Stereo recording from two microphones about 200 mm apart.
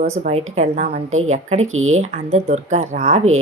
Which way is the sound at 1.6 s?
90° right.